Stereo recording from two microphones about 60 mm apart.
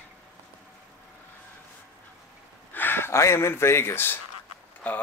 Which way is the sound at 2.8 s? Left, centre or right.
Left.